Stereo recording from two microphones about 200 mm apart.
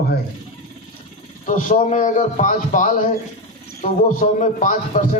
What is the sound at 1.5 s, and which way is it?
A man's voice, 40° left (ahead or behind).